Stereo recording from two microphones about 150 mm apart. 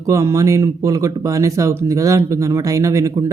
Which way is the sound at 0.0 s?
20° right (ahead or behind).